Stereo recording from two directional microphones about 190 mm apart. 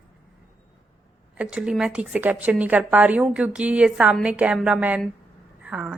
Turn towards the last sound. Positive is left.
turn(degrees=-5)  # may be behind; listen again after turning